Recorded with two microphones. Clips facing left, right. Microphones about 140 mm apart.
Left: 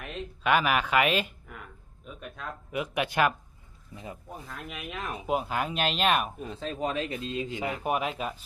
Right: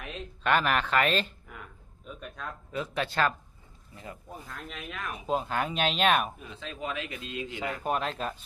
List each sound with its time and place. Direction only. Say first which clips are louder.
0.0 s speech: left 2 dB; centre (ahead or behind)
1.5 s a sound: left 1 dB; centre (ahead or behind)
2.0 s speech: even; centre (ahead or behind)
2.7 s speech: left 2 dB; 15° left (ahead or behind)
6.4 s speech: left 6 dB; 40° left (ahead or behind)
7.4 s speech: right 2 dB; 15° left (ahead or behind)